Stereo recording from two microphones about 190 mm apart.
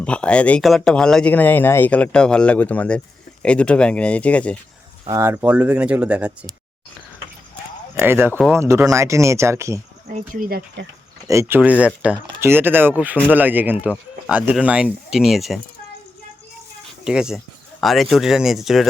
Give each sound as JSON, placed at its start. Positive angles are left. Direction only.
{"t": 0.0, "sound": "speech", "side_deg": 5}
{"t": 5.0, "sound": "speech", "side_deg": -15}
{"t": 7.9, "sound": "speech", "side_deg": -10}
{"t": 10.1, "sound": "speech", "side_deg": -40}
{"t": 11.3, "sound": "speech", "side_deg": -15}
{"t": 17.0, "sound": "speech", "side_deg": -5}